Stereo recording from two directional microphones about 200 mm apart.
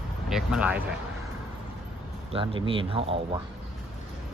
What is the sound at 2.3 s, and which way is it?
Speech, 25° right (ahead or behind).